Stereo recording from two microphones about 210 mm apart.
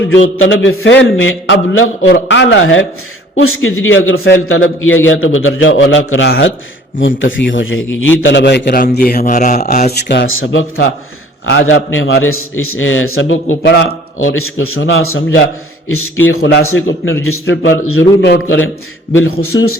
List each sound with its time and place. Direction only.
0.1 s a man's voice: 65° left (ahead or behind)
2.1 s a man's voice: 60° left (ahead or behind)
3.3 s a man's voice: 80° left
8.2 s a man's voice: 60° left (ahead or behind); by 9.9 s 35° left (ahead or behind)
9.9 s a man's voice: 55° left (ahead or behind); by 16.1 s 85° left
16.6 s a man's voice: 70° left (ahead or behind); by 19.8 s 90° left